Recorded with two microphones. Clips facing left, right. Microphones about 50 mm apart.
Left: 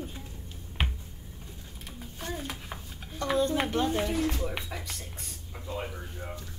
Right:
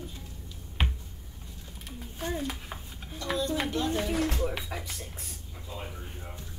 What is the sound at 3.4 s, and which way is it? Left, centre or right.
Speech, left.